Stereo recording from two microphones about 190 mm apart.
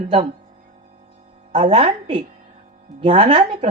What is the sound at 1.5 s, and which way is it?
A woman's voice, 30° right (ahead or behind).